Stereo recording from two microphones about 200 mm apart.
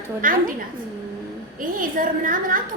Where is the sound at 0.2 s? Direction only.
45° right (ahead or behind).